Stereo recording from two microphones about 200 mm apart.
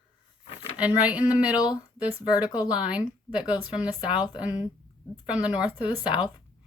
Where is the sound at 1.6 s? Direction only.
20° left (ahead or behind).